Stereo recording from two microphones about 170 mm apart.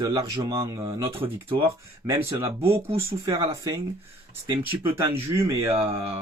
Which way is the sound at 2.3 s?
15° right (ahead or behind).